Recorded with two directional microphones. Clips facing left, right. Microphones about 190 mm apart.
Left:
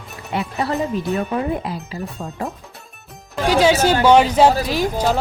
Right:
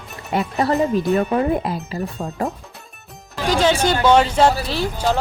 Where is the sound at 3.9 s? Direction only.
10° left (ahead or behind).